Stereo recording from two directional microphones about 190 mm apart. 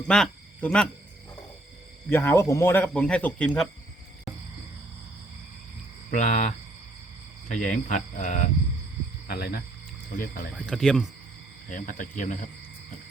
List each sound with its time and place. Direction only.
0.1 s speech: 5° left (ahead or behind)
2.0 s speech: 10° left (ahead or behind)
6.1 s speech: 40° left (ahead or behind)
9.2 s speech: 55° left (ahead or behind)
10.5 s speech: centre (ahead or behind)
11.7 s speech: 45° left (ahead or behind)